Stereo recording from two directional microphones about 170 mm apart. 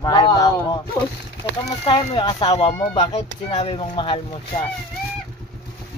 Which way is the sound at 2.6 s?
35° left (ahead or behind).